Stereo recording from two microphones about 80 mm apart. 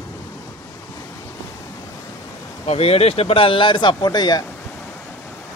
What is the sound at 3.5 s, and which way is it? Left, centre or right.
Speech, left.